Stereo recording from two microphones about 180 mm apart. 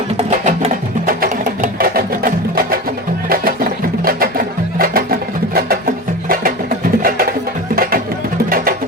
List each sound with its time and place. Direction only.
0.2 s music: 40° right (ahead or behind)